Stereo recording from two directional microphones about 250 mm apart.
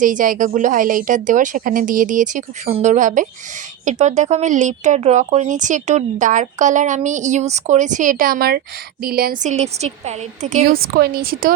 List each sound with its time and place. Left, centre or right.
0.0 s a woman's voice: right